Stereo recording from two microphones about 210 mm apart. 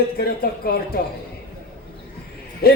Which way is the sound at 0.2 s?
50° left (ahead or behind).